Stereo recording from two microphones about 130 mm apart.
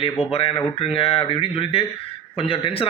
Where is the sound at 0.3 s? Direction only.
50° left (ahead or behind).